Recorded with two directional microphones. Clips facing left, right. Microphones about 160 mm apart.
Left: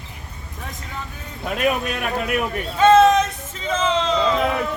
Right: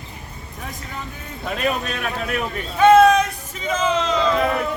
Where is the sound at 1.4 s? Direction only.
10° left (ahead or behind).